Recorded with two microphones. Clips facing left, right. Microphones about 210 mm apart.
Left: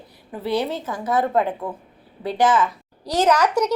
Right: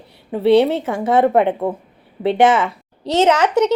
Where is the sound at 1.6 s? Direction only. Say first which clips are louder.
Right 8 dB; 65° right (ahead or behind).